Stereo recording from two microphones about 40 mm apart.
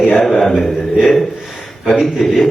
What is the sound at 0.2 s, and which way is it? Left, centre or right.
Speech, centre.